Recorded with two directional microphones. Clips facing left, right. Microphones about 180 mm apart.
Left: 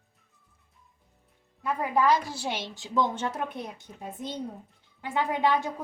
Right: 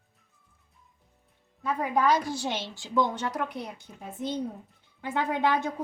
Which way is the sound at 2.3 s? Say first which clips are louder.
Right 2 dB; 10° left (ahead or behind).